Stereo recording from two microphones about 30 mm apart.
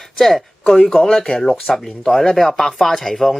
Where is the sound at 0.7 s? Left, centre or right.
Left.